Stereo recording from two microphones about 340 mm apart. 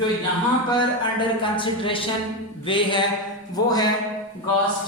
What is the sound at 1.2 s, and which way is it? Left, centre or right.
A man's voice, centre.